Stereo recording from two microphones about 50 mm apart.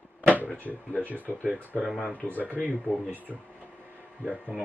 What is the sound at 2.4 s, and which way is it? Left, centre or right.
Speech, right.